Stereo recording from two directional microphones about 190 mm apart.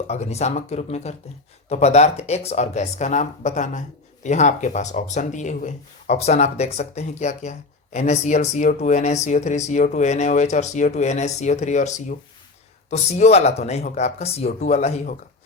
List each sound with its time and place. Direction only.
0.1 s speech: 35° left (ahead or behind)